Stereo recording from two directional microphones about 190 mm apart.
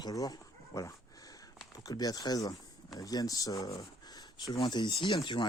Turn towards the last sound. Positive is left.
turn(degrees=20)  # may be behind; listen again after turning